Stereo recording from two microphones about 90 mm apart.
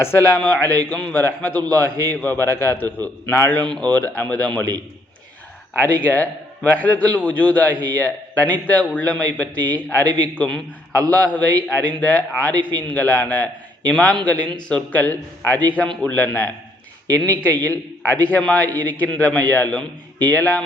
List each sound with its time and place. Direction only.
0.0 s a man's voice: 25° left (ahead or behind)
5.8 s a man's voice: 20° left (ahead or behind)